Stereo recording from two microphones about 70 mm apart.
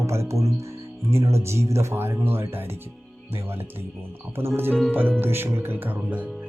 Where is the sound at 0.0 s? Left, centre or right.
Right.